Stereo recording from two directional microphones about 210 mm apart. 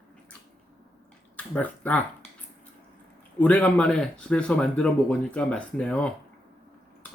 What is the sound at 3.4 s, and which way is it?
Speech, 5° left (ahead or behind).